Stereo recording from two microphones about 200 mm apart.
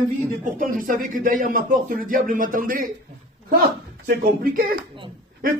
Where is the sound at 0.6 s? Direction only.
45° right (ahead or behind).